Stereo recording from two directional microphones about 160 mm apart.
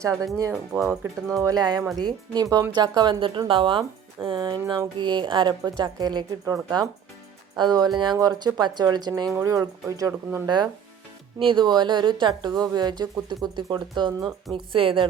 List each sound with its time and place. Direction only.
0.0 s speech: 20° right (ahead or behind)
0.8 s speech: centre (ahead or behind)
1.4 s speech: 25° right (ahead or behind)
11.3 s a woman's voice: 30° right (ahead or behind)